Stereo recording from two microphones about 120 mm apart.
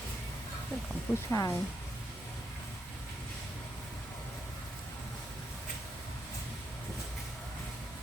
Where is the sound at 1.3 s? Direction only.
25° left (ahead or behind).